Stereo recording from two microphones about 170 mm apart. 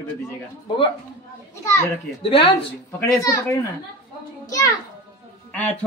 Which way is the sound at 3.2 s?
20° left (ahead or behind).